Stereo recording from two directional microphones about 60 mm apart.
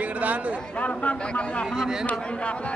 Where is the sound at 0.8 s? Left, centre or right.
Left.